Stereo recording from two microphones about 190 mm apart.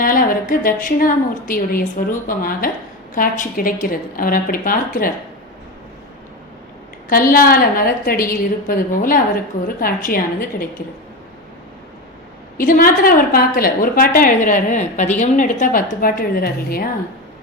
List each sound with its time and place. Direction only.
0.0 s a woman's voice: 45° left (ahead or behind)
7.1 s a woman's voice: 50° left (ahead or behind)
12.5 s a woman's voice: 50° left (ahead or behind)